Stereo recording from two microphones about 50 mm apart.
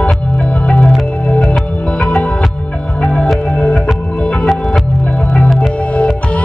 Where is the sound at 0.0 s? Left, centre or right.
Left.